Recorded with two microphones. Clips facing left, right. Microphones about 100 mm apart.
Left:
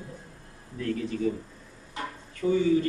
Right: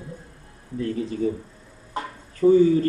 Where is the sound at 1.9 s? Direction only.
40° right (ahead or behind).